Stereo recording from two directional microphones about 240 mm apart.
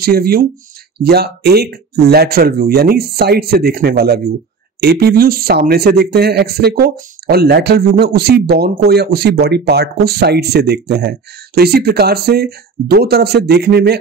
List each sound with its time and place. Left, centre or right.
0.0 s speech: right